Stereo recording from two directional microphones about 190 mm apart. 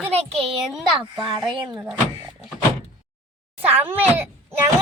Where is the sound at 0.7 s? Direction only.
Centre (ahead or behind).